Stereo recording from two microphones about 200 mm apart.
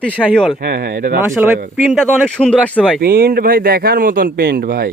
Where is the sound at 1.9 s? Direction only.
5° left (ahead or behind).